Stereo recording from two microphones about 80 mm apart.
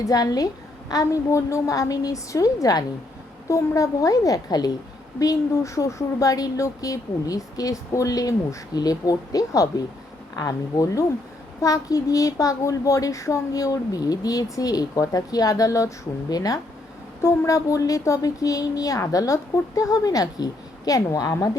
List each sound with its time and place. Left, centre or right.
0.0 s a woman's voice: left
5.2 s a woman's voice: left